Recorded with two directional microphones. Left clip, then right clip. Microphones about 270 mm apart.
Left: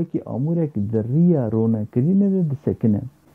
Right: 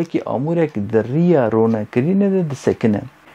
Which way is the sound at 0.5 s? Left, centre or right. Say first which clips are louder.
Right 6 dB; centre.